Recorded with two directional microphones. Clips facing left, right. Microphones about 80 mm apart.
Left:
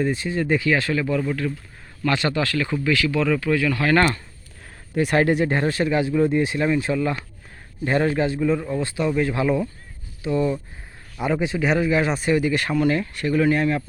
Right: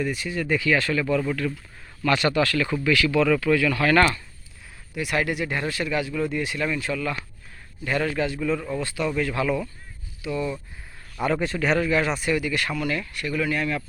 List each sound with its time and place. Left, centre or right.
0.0 s speech: left
1.0 s speech: centre
2.0 s speech: left
11.2 s speech: centre